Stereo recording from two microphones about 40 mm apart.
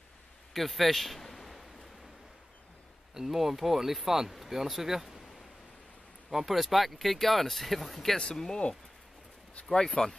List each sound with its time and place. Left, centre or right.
0.5 s a sound: centre
3.2 s speech: centre
6.3 s speech: centre
8.2 s speech: centre